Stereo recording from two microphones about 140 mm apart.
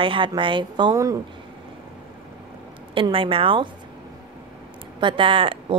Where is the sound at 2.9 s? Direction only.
40° right (ahead or behind).